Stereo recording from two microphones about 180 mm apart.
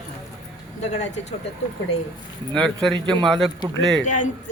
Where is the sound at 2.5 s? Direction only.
Centre (ahead or behind).